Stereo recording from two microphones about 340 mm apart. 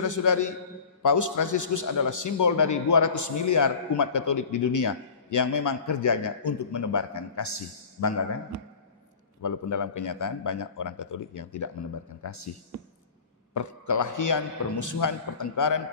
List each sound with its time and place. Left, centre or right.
0.0 s a man's voice: left
9.4 s a man's voice: left
13.5 s a man's voice: left